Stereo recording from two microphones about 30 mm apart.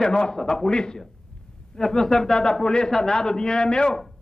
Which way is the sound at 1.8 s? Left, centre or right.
Centre.